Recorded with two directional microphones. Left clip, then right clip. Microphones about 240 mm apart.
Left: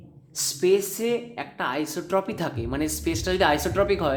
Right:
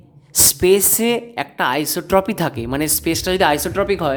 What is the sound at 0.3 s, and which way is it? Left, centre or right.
A woman's voice, right.